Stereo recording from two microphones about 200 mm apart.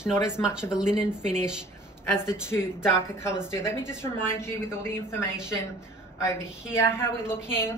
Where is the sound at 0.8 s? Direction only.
35° right (ahead or behind).